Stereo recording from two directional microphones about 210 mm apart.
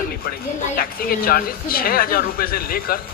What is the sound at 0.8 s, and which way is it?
Speech, 45° left (ahead or behind).